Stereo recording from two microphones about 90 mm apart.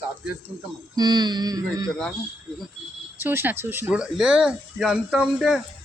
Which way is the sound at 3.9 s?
10° right (ahead or behind).